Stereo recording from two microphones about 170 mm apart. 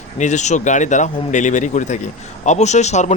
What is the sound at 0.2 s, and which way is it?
A man's voice, 45° left (ahead or behind).